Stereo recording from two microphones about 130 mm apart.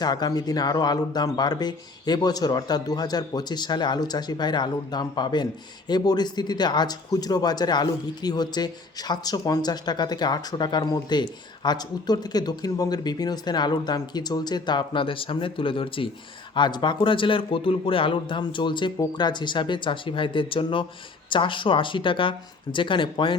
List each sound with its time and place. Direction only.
0.0 s speech: 30° left (ahead or behind)